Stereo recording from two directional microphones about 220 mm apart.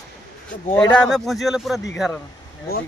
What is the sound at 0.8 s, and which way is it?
A man's voice, 5° left (ahead or behind).